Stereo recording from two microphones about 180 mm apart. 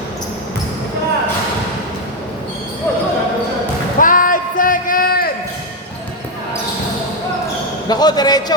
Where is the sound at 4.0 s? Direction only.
50° left (ahead or behind).